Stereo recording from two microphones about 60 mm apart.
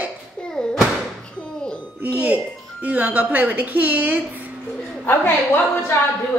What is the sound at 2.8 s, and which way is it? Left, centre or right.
A woman's voice, right.